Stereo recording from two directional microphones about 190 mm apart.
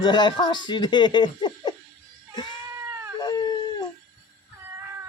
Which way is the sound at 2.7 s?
15° right (ahead or behind).